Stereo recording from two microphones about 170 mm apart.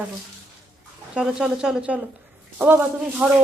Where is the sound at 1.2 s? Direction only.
5° right (ahead or behind).